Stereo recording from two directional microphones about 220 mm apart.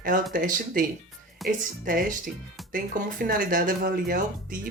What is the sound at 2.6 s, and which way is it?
Music, centre (ahead or behind).